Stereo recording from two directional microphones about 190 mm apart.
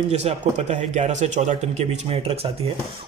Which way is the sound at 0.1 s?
35° right (ahead or behind).